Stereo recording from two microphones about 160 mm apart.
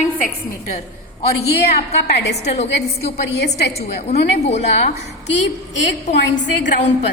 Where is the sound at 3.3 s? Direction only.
90° left.